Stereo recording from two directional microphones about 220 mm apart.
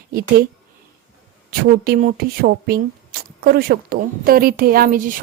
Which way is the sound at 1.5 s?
40° right (ahead or behind).